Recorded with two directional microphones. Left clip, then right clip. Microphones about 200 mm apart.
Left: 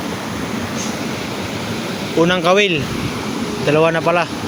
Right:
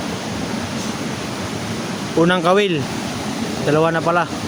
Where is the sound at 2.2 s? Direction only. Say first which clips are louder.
Left 2 dB; 20° right (ahead or behind).